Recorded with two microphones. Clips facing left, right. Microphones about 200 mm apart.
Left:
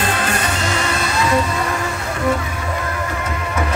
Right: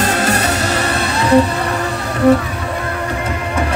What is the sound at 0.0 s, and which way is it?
Music, 40° right (ahead or behind).